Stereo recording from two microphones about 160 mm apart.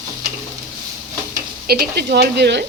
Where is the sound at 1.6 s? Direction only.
75° right (ahead or behind).